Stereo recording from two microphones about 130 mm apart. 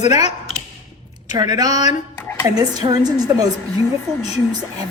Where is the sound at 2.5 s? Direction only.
30° right (ahead or behind).